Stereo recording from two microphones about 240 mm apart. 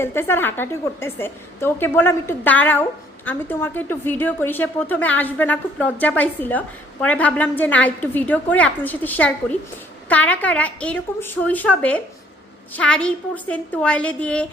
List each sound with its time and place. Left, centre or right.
0.0 s a woman's voice: centre